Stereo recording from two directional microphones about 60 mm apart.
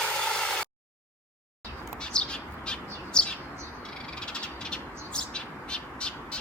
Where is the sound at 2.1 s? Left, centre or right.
Centre.